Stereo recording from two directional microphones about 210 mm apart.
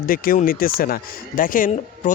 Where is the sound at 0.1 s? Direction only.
45° left (ahead or behind).